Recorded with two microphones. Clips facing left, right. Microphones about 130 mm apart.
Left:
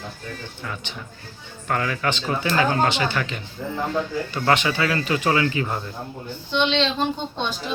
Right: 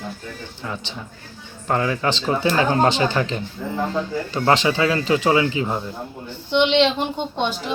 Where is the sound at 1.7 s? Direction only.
25° right (ahead or behind).